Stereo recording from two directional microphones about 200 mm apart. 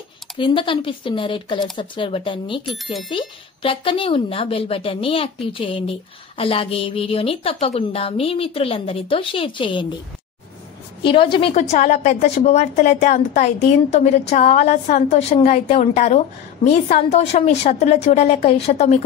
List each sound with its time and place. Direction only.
0.4 s speech: 25° left (ahead or behind)
2.6 s speech: centre (ahead or behind)
3.1 s speech: 25° left (ahead or behind)
11.0 s a woman's voice: 25° left (ahead or behind)